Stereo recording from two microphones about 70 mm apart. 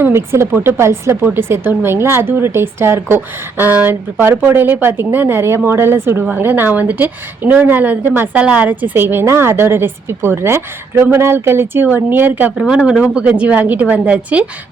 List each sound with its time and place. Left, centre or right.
0.0 s a woman's voice: right
8.3 s a woman's voice: centre
12.5 s a woman's voice: centre